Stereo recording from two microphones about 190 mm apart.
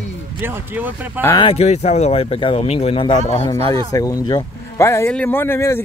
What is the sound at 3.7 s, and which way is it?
Speech, 20° left (ahead or behind).